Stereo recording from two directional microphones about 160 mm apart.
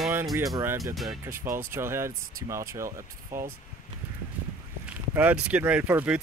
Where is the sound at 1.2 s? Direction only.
15° right (ahead or behind).